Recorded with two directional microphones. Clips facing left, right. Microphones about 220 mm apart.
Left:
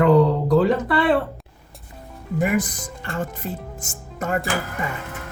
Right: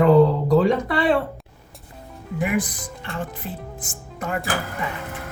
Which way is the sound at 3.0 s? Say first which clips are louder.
Left 3 dB; 45° left (ahead or behind).